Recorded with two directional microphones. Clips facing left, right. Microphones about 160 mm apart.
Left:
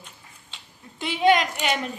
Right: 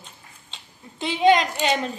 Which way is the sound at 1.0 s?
25° right (ahead or behind).